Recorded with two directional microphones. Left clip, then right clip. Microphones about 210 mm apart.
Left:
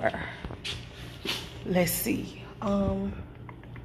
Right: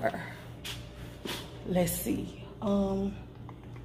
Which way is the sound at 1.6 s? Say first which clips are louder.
Left 3 dB; 15° left (ahead or behind).